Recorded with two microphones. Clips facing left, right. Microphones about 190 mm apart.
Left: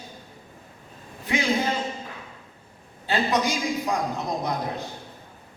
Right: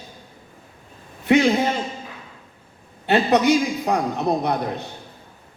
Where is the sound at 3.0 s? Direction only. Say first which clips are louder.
Right 7 dB; 65° right (ahead or behind).